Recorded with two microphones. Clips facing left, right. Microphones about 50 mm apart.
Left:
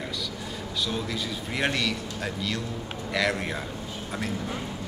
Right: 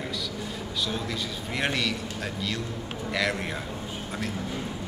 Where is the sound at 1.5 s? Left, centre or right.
Centre.